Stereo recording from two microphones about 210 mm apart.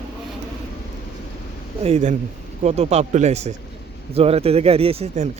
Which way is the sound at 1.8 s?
30° right (ahead or behind).